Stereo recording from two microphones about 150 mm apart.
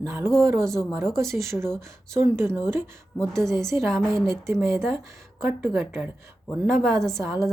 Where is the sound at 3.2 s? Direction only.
5° left (ahead or behind).